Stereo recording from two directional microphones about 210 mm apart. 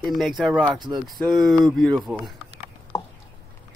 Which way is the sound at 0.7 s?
20° right (ahead or behind).